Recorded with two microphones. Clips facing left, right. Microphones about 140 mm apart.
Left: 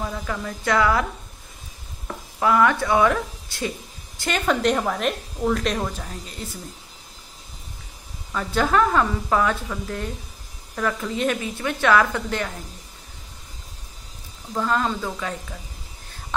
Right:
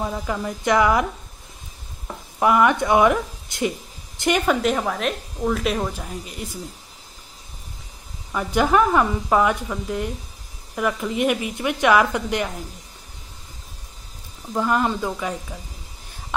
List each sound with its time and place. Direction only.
0.0 s a woman's voice: 15° right (ahead or behind)
2.4 s a woman's voice: 15° right (ahead or behind)
8.3 s a woman's voice: 15° right (ahead or behind)
14.5 s a woman's voice: 15° right (ahead or behind)